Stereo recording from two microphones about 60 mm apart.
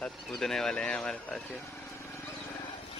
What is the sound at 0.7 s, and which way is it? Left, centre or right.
Speech, centre.